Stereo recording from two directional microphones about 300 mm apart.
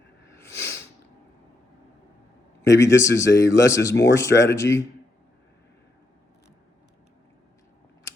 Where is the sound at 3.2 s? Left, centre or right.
Left.